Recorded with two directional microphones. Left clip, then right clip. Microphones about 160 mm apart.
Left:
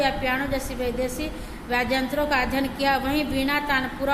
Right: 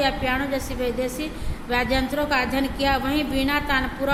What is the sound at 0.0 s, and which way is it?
A woman's voice, 5° right (ahead or behind).